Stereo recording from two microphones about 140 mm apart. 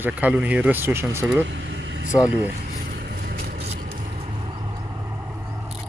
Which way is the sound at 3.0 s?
90° right.